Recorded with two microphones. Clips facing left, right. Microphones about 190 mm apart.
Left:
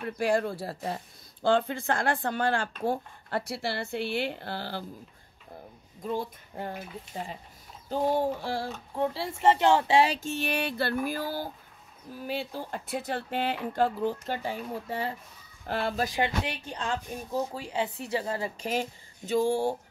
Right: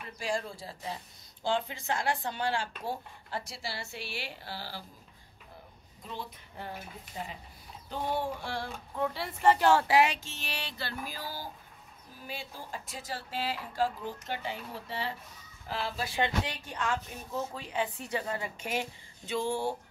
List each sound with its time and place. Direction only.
0.0 s speech: 60° left (ahead or behind)
6.0 s a woman's voice: 45° left (ahead or behind); by 10.1 s 25° left (ahead or behind)
10.2 s speech: 55° left (ahead or behind)
13.8 s speech: 45° left (ahead or behind)
16.6 s a woman's voice: 30° left (ahead or behind)